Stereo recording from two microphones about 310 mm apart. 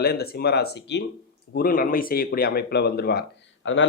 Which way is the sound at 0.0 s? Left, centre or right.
Left.